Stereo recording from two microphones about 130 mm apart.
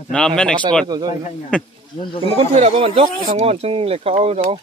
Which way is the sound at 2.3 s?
55° right (ahead or behind).